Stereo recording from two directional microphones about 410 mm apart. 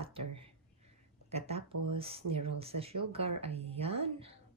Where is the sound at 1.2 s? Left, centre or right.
Centre.